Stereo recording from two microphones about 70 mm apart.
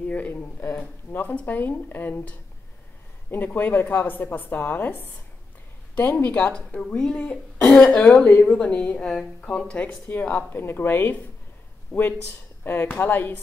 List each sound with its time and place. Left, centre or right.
0.0 s speech: left; by 8.0 s centre
8.0 s speech: left
10.0 s a woman's voice: left